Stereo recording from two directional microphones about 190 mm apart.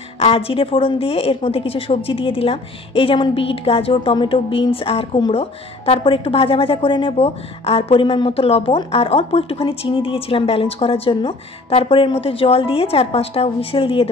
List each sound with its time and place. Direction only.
0.2 s a woman's voice: 30° left (ahead or behind)